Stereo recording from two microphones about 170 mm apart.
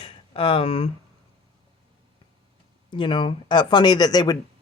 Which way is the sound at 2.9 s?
30° left (ahead or behind).